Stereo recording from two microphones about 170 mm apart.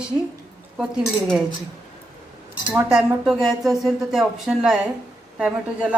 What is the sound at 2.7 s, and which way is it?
Speech, 5° right (ahead or behind).